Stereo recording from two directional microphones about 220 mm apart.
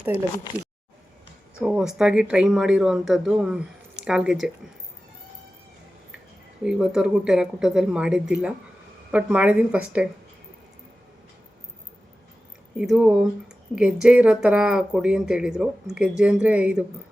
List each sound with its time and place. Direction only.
1.6 s speech: 5° right (ahead or behind)
6.6 s speech: 5° right (ahead or behind)
12.7 s speech: 5° right (ahead or behind)